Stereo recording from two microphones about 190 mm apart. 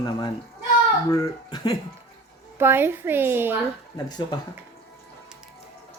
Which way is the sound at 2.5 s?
10° right (ahead or behind).